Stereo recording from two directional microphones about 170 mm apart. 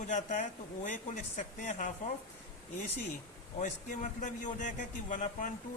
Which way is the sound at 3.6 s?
45° left (ahead or behind).